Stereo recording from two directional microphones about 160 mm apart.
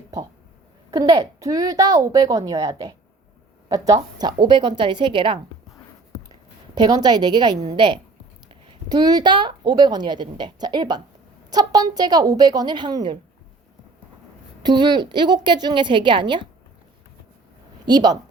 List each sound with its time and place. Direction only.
0.9 s a woman's voice: 25° right (ahead or behind)
6.7 s a woman's voice: 25° right (ahead or behind)
14.6 s a woman's voice: 25° right (ahead or behind)
17.8 s a woman's voice: 25° right (ahead or behind)